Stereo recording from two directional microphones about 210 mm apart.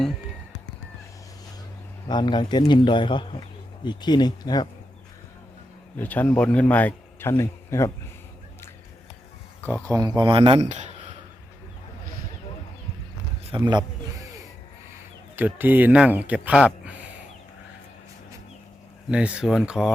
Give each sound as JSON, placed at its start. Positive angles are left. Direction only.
{"t": 2.0, "sound": "speech", "side_deg": 20}
{"t": 6.0, "sound": "speech", "side_deg": 10}
{"t": 9.9, "sound": "speech", "side_deg": -20}
{"t": 13.4, "sound": "speech", "side_deg": -25}
{"t": 15.4, "sound": "speech", "side_deg": -10}
{"t": 19.1, "sound": "speech", "side_deg": -5}